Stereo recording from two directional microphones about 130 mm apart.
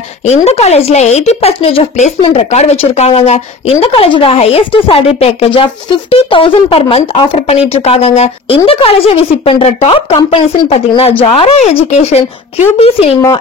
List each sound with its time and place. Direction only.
0.3 s speech: 55° left (ahead or behind)